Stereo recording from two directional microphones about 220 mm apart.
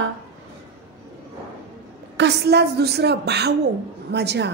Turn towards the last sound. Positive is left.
turn(degrees=-50)  # may be behind; listen again after turning